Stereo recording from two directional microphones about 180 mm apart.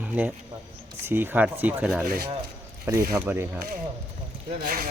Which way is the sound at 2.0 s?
60° right (ahead or behind).